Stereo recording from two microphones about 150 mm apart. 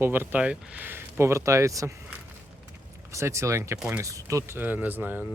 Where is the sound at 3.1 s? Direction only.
20° right (ahead or behind).